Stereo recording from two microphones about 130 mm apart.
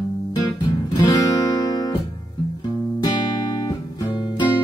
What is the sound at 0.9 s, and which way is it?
Music, 30° left (ahead or behind).